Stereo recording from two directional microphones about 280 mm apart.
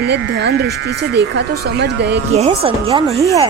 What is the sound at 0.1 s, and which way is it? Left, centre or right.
Speech, right.